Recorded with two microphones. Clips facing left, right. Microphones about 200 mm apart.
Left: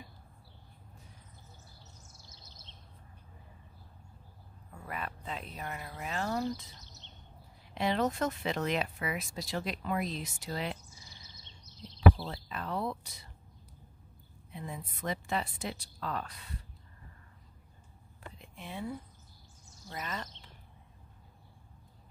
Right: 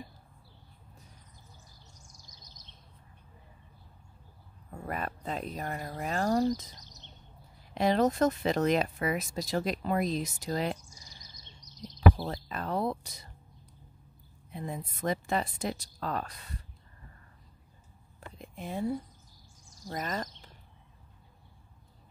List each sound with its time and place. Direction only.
2.2 s bird: 15° right (ahead or behind)
4.7 s speech: 45° right (ahead or behind)
7.7 s speech: 40° right (ahead or behind)
12.2 s a sound: 45° right (ahead or behind)
14.5 s a woman's voice: 45° right (ahead or behind)
18.4 s speech: 40° right (ahead or behind)
19.9 s a sound: 45° right (ahead or behind)